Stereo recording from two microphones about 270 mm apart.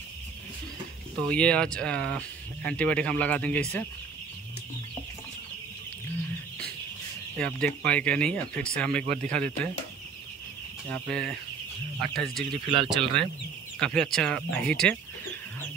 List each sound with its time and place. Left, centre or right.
1.3 s speech: centre
7.3 s speech: centre
9.0 s speech: right
9.3 s speech: centre
10.9 s speech: centre
12.6 s speech: centre
13.7 s speech: centre